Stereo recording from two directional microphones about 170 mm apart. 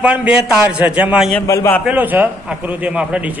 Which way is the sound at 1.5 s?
15° left (ahead or behind).